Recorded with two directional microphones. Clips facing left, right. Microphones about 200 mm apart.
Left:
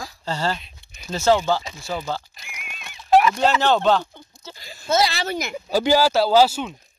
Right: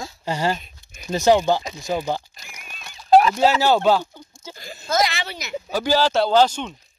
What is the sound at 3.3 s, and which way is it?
Speech, 10° right (ahead or behind).